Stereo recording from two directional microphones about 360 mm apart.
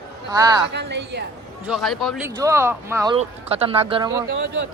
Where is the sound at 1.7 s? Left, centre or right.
Centre.